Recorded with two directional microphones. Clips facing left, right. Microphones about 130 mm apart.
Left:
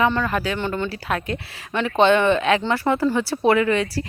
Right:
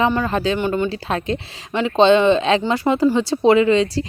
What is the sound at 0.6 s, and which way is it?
Speech, 15° right (ahead or behind).